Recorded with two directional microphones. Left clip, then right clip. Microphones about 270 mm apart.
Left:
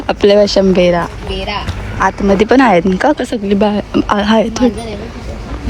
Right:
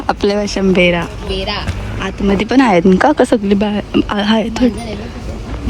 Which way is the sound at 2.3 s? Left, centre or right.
Centre.